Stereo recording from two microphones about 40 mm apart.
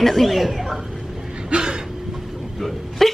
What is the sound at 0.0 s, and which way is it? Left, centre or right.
Speech, centre.